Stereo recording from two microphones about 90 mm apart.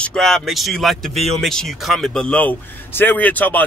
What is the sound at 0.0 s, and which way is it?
Speech, 5° left (ahead or behind).